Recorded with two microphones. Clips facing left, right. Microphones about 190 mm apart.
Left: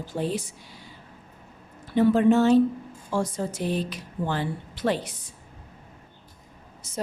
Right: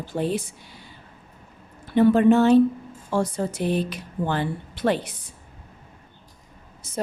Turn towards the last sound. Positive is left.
turn(degrees=-55)  # may be behind; listen again after turning